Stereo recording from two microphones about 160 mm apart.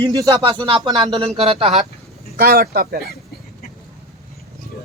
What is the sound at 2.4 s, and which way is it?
Speech, 70° right (ahead or behind).